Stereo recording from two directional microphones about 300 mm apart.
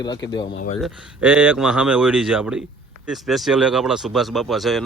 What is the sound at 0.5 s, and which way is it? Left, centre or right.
Speech, left.